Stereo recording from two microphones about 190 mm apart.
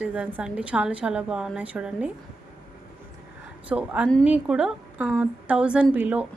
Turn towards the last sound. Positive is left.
turn(degrees=-10)  # may be behind; listen again after turning